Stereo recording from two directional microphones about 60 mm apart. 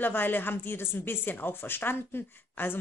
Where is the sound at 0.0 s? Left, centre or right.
Left.